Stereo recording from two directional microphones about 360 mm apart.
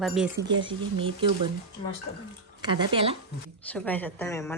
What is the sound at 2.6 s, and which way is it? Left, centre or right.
Speech, centre.